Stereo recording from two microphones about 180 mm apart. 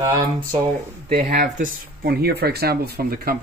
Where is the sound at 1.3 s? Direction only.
60° right (ahead or behind).